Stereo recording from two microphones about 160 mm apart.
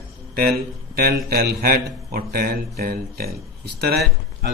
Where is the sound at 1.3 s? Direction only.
70° right (ahead or behind).